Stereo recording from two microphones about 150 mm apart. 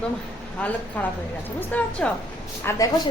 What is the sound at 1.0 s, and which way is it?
A woman's voice, 10° left (ahead or behind).